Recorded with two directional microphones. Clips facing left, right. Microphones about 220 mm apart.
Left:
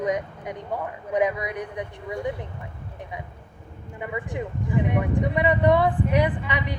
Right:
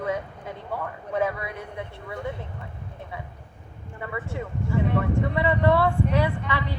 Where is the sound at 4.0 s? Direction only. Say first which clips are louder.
Left 2 dB; 15° left (ahead or behind).